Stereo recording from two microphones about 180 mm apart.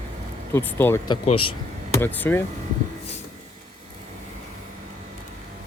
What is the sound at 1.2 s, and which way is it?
Speech, 30° left (ahead or behind).